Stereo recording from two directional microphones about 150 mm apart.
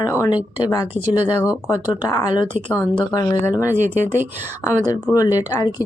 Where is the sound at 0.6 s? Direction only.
25° left (ahead or behind).